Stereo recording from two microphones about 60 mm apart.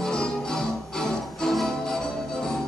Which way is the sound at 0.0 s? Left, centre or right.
Centre.